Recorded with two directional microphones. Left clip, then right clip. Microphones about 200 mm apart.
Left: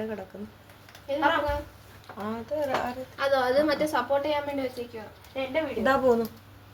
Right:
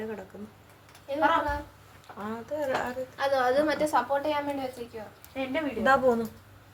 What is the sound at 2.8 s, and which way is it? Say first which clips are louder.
A woman's voice: left 1 dB; 5° right (ahead or behind).